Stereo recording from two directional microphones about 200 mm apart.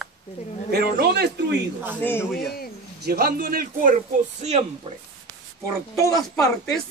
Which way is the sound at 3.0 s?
50° right (ahead or behind).